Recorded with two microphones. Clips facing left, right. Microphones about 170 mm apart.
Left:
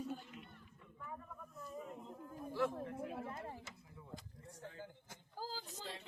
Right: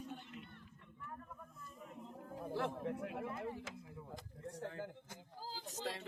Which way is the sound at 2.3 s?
60° right (ahead or behind).